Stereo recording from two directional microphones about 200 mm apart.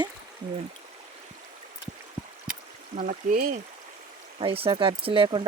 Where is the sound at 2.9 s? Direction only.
40° right (ahead or behind).